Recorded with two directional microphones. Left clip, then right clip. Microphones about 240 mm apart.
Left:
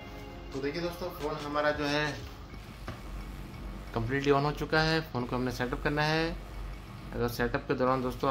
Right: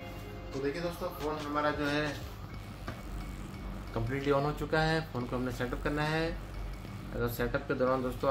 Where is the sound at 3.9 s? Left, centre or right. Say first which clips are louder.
Left 3 dB; left.